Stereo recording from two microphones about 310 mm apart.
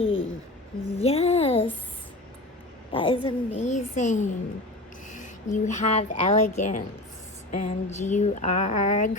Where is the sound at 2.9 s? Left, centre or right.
Centre.